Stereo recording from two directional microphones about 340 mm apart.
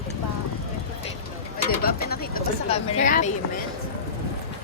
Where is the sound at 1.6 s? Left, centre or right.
Left.